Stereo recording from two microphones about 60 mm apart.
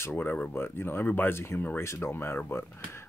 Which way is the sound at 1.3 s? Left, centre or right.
Left.